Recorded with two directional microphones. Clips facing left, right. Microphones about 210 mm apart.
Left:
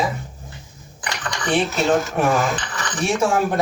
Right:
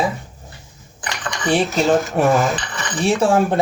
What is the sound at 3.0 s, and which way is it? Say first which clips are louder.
Speech: right 3 dB; 30° right (ahead or behind).